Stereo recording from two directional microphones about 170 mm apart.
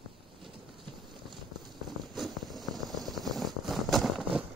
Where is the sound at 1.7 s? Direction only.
Centre (ahead or behind).